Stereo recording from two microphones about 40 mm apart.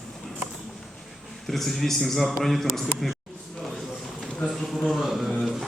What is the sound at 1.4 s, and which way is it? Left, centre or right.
A man's voice, centre.